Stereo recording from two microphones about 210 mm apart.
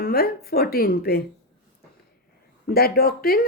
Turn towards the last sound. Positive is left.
turn(degrees=45)  # may be behind; listen again after turning